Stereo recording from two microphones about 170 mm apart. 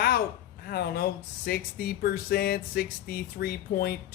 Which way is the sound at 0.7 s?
65° left (ahead or behind).